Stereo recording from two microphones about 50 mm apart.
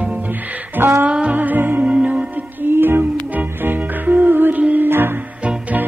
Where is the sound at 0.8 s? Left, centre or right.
Right.